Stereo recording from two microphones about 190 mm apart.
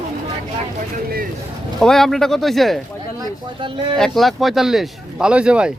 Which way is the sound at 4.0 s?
Centre (ahead or behind).